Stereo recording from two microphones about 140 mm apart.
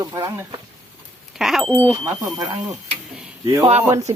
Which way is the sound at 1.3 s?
Centre (ahead or behind).